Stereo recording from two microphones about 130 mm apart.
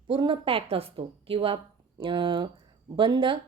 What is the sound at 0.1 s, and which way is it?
A woman's voice, 40° right (ahead or behind).